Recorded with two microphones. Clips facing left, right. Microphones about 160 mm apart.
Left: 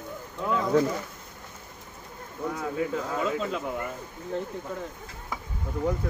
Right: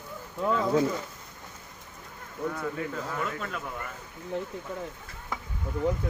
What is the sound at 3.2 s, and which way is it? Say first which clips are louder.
Speech: left 6 dB; 20° left (ahead or behind).